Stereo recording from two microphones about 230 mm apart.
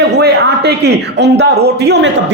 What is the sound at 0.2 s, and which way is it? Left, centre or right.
A man's voice, right.